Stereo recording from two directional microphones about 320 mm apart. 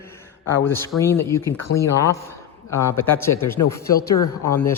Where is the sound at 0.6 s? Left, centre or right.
Centre.